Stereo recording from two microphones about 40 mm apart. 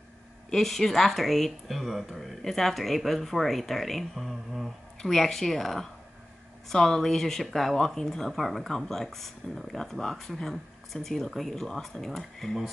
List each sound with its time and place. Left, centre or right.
0.5 s speech: centre
11.5 s speech: centre